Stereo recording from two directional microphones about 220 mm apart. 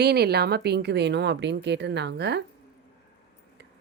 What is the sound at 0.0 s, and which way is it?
Speech, 45° right (ahead or behind).